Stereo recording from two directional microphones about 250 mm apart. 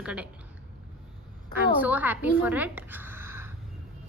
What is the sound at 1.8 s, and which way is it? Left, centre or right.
A woman's voice, centre.